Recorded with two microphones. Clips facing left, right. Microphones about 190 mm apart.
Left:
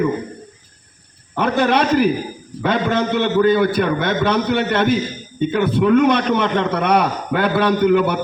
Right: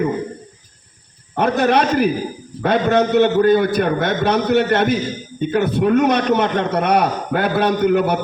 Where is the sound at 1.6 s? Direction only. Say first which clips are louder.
Left 1 dB; 50° right (ahead or behind).